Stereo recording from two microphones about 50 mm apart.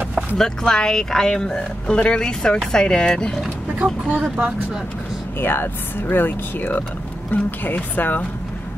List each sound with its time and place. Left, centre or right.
0.4 s speech: centre
3.8 s speech: right
5.4 s speech: left